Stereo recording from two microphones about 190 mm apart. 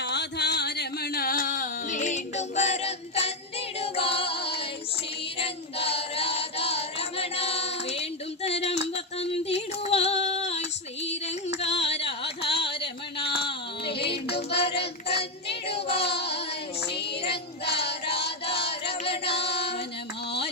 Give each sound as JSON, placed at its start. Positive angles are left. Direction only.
{"t": 0.0, "sound": "a sound", "side_deg": 60}
{"t": 3.8, "sound": "singing", "side_deg": 30}
{"t": 8.4, "sound": "a sound", "side_deg": 35}
{"t": 9.1, "sound": "music", "side_deg": 30}
{"t": 10.2, "sound": "female singing", "side_deg": 35}
{"t": 11.6, "sound": "carnatic music", "side_deg": 35}
{"t": 14.0, "sound": "music", "side_deg": 60}
{"t": 15.6, "sound": "child singing", "side_deg": 30}
{"t": 16.0, "sound": "child singing", "side_deg": 60}
{"t": 19.2, "sound": "music", "side_deg": 60}